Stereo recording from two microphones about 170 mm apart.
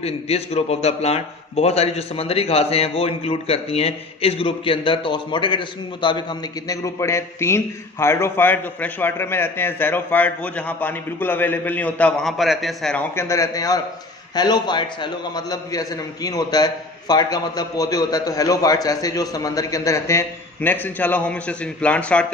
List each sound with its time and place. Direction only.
0.0 s a man's voice: 40° left (ahead or behind)
6.7 s a man's voice: 15° left (ahead or behind); by 13.0 s centre (ahead or behind)
13.1 s a man's voice: 15° left (ahead or behind)